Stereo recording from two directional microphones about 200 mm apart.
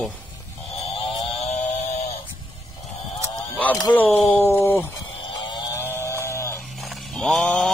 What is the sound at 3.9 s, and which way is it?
Speech, 10° left (ahead or behind).